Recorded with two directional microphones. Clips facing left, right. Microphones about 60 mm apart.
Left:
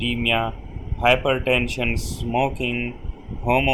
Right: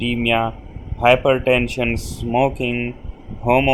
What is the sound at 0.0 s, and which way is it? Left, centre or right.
Speech, right.